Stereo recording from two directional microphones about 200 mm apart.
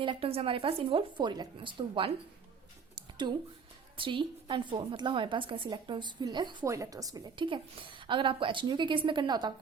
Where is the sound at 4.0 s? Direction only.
25° right (ahead or behind).